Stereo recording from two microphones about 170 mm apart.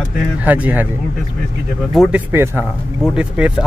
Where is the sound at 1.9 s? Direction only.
10° right (ahead or behind).